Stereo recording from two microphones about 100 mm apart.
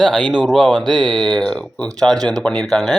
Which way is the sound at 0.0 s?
5° left (ahead or behind).